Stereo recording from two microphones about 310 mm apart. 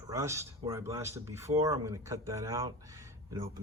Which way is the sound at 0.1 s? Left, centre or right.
Centre.